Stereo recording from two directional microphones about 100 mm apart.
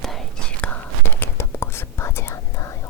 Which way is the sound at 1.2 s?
25° left (ahead or behind).